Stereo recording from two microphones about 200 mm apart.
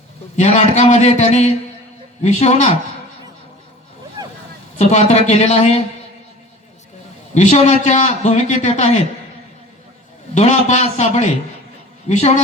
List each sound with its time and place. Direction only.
0.3 s a man's voice: 35° left (ahead or behind)
4.8 s a man's voice: 35° left (ahead or behind)
7.3 s a man's voice: 35° left (ahead or behind)
10.3 s a man's voice: 35° left (ahead or behind)